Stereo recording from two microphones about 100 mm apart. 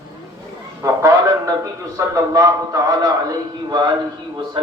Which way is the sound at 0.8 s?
30° right (ahead or behind).